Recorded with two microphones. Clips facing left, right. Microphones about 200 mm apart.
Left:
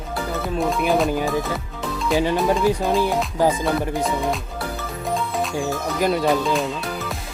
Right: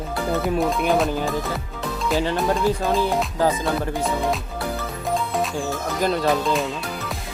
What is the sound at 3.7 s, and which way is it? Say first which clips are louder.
Speech: left 1 dB; centre (ahead or behind).